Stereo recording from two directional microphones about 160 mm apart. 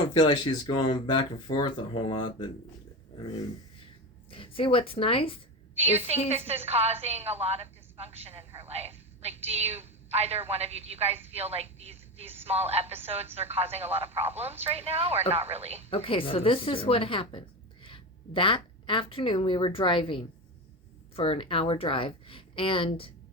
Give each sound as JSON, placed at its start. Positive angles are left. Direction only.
{"t": 0.1, "sound": "speech", "side_deg": 25}
{"t": 4.3, "sound": "a woman's voice", "side_deg": 35}
{"t": 5.7, "sound": "a woman's voice", "side_deg": -40}
{"t": 15.9, "sound": "speech", "side_deg": 35}